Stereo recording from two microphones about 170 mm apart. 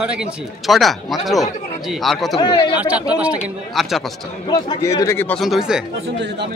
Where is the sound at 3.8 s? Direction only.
Centre (ahead or behind).